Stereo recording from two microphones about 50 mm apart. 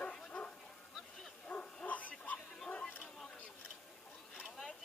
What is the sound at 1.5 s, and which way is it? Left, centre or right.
Bow-wow, left.